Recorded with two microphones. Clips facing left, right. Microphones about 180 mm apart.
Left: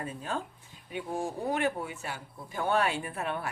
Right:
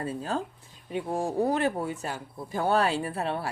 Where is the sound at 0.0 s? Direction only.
35° right (ahead or behind).